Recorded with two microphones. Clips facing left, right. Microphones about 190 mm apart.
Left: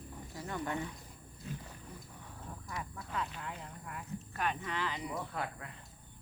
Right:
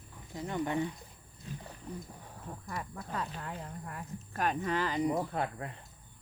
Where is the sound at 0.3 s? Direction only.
20° right (ahead or behind).